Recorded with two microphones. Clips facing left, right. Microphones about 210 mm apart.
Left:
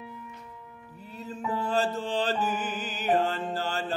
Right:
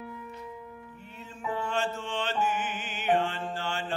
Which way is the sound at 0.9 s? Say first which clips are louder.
Left 6 dB; 35° left (ahead or behind).